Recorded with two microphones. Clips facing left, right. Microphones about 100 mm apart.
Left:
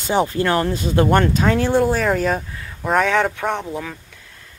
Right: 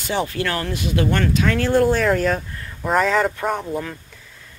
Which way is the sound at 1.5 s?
20° left (ahead or behind).